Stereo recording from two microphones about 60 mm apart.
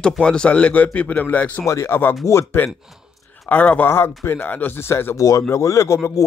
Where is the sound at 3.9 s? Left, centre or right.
Left.